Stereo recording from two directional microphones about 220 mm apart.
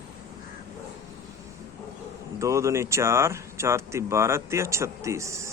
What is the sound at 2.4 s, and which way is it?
Speech, 15° right (ahead or behind).